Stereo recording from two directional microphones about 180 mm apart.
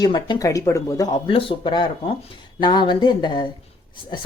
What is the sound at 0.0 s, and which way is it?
Speech, 25° left (ahead or behind).